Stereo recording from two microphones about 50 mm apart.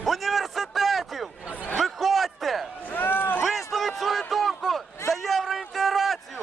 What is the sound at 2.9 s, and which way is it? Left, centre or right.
Boat, left.